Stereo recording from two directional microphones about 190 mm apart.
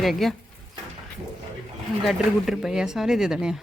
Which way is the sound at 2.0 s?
Centre (ahead or behind).